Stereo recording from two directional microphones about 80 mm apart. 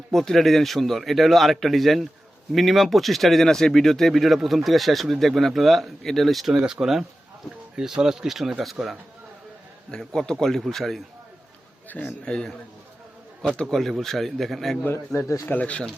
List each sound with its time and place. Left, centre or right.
0.1 s speech: centre
11.9 s a man's voice: centre
13.6 s speech: centre
15.1 s speech: left
15.4 s a man's voice: centre